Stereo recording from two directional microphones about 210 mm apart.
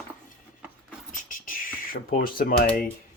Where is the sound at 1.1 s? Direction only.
40° left (ahead or behind).